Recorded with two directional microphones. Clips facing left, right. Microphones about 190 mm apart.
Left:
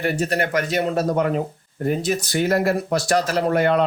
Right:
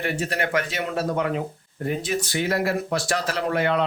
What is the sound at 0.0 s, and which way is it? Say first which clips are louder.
Speech: left 4 dB; 40° left (ahead or behind).